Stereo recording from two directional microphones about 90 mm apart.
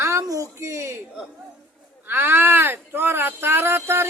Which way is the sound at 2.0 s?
25° right (ahead or behind).